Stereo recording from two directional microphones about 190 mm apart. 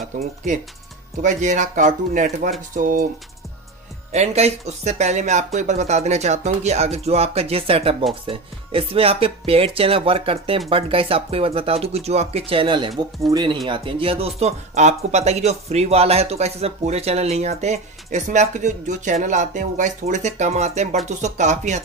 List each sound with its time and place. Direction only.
1.2 s speech: 40° right (ahead or behind)
4.1 s speech: 35° right (ahead or behind)